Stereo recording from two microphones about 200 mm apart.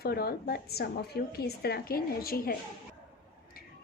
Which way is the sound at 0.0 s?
50° left (ahead or behind).